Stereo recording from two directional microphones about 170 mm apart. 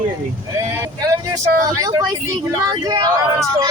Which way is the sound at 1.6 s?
20° right (ahead or behind).